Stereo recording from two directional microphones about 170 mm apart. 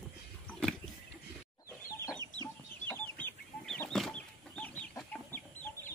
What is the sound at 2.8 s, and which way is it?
Chicken, 10° left (ahead or behind).